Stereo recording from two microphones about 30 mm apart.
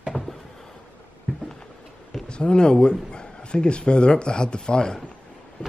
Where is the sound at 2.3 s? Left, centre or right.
Left.